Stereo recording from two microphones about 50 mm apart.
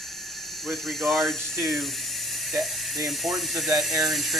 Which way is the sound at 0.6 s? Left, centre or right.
Centre.